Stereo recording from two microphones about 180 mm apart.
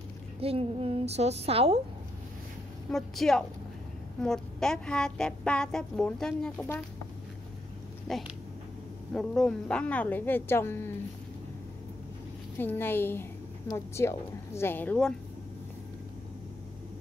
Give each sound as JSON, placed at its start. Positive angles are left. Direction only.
{"t": 0.4, "sound": "a woman's voice", "side_deg": -35}
{"t": 2.9, "sound": "speech", "side_deg": 0}
{"t": 8.1, "sound": "a woman's voice", "side_deg": 0}
{"t": 12.5, "sound": "a woman's voice", "side_deg": 10}